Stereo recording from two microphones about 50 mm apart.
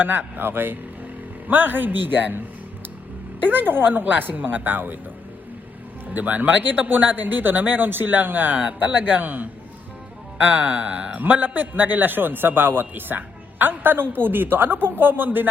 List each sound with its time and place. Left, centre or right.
0.0 s a man's voice: right
3.4 s speech: right
6.1 s speech: right
11.2 s a man's voice: right